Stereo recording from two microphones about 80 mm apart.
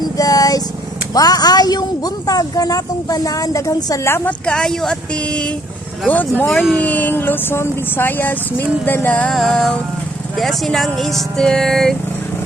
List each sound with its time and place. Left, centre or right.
0.2 s vehicle: left
1.1 s a woman's voice: left
4.3 s speech: centre
6.5 s speech: centre
6.7 s speech: centre
9.3 s speech: centre